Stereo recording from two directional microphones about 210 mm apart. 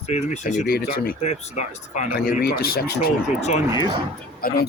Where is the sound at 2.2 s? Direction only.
45° left (ahead or behind).